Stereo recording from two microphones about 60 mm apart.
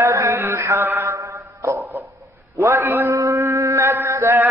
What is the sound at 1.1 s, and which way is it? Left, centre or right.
Mantra, right.